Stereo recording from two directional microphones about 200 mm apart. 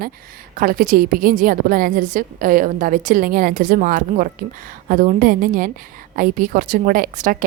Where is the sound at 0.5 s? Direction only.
45° right (ahead or behind).